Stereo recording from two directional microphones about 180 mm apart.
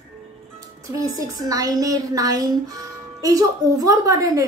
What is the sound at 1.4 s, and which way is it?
A woman's voice, 20° right (ahead or behind).